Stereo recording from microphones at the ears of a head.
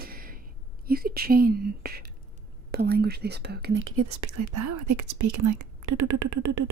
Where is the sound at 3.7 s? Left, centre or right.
Right.